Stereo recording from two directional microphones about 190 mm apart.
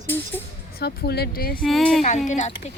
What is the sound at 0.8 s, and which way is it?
Speech, 55° left (ahead or behind).